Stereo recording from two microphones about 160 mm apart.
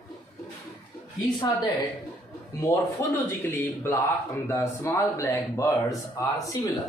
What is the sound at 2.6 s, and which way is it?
Speech, 20° left (ahead or behind).